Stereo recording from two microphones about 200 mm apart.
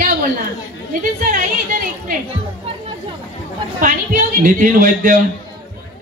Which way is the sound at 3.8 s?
40° right (ahead or behind).